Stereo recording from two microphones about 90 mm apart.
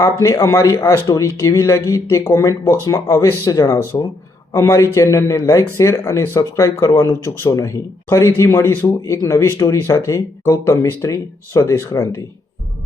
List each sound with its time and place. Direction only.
0.0 s speech: 35° left (ahead or behind)